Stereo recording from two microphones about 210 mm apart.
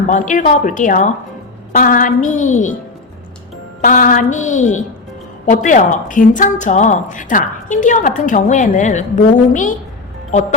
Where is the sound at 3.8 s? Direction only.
40° left (ahead or behind).